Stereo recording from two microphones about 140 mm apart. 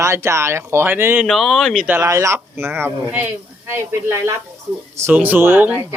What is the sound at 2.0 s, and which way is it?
Speech, 20° right (ahead or behind).